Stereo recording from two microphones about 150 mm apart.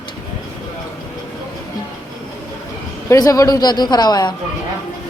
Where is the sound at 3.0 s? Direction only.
25° left (ahead or behind).